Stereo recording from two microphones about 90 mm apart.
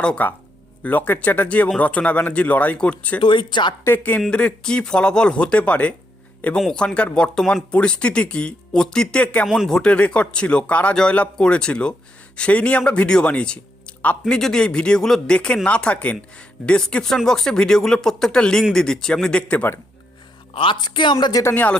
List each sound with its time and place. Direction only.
0.0 s speech: 15° left (ahead or behind)
3.2 s speech: 65° left (ahead or behind)
3.8 s speech: 20° left (ahead or behind)
9.5 s speech: 5° right (ahead or behind)
9.7 s speech: 10° left (ahead or behind)
20.5 s a woman's voice: 75° left (ahead or behind)
20.8 s a woman's voice: 55° left (ahead or behind)
21.4 s speech: 20° left (ahead or behind)